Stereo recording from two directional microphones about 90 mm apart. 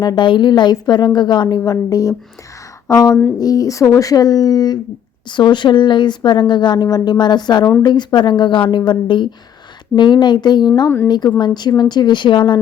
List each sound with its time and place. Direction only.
0.0 s a woman's voice: 55° left (ahead or behind)
10.8 s speech: 25° left (ahead or behind)
11.3 s speech: 55° left (ahead or behind)